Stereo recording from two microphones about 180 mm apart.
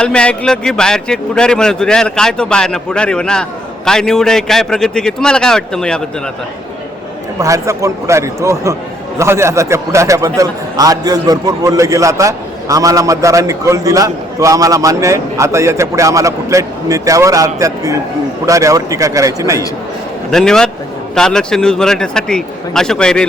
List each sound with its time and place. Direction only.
0.0 s a man's voice: 5° left (ahead or behind)
7.3 s a man's voice: 15° right (ahead or behind)
20.3 s a man's voice: 5° left (ahead or behind)